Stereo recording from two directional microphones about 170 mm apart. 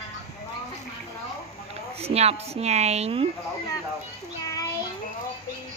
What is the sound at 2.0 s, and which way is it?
A woman's voice, 35° right (ahead or behind).